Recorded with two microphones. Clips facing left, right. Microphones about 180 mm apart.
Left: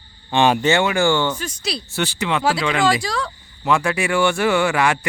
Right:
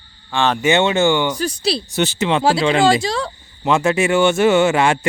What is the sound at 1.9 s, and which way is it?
Speech, 20° right (ahead or behind).